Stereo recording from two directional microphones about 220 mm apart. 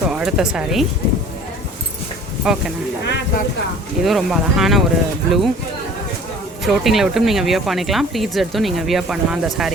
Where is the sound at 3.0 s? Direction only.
50° left (ahead or behind).